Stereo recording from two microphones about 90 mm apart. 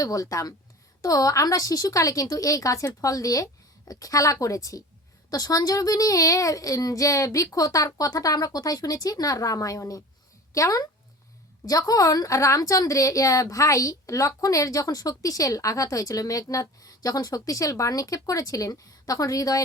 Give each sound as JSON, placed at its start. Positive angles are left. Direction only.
{"t": 0.0, "sound": "a child's voice", "side_deg": 40}